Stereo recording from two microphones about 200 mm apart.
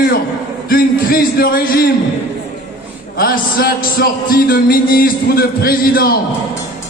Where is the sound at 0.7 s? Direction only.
45° left (ahead or behind).